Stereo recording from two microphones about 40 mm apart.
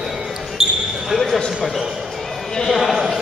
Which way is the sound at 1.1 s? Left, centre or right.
Centre.